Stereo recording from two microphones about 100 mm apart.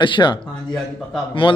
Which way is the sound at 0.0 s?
50° left (ahead or behind).